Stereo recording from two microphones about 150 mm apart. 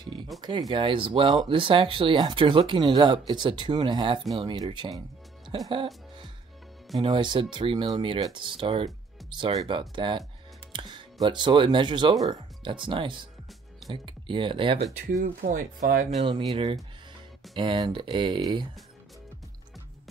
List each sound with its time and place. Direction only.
0.4 s speech: 25° right (ahead or behind)
7.0 s speech: 30° right (ahead or behind)
15.0 s speech: 55° right (ahead or behind)
16.3 s speech: 35° right (ahead or behind)